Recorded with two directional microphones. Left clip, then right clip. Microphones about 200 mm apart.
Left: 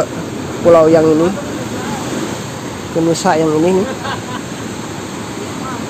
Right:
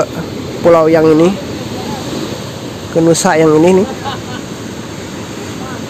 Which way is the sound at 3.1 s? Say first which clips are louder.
Right 4 dB; 15° right (ahead or behind).